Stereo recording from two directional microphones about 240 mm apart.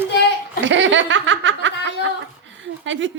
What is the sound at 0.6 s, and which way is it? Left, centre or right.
Speech, right.